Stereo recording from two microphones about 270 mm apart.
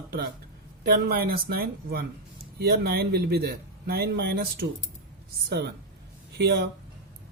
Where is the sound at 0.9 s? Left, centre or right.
Right.